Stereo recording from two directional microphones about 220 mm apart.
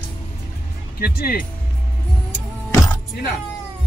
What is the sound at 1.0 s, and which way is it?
Speech, 45° left (ahead or behind).